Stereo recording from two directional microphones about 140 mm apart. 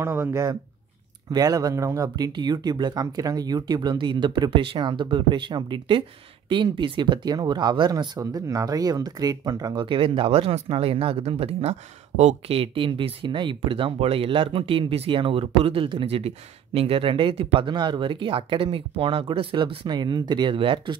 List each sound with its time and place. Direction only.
0.0 s speech: 20° right (ahead or behind); by 20.9 s 35° right (ahead or behind)